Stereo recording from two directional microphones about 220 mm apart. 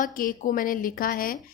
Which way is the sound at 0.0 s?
40° left (ahead or behind).